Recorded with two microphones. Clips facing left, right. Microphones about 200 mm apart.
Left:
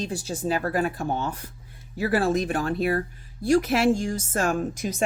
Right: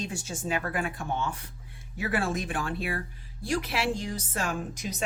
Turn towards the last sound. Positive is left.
turn(degrees=50)  # may be behind; listen again after turning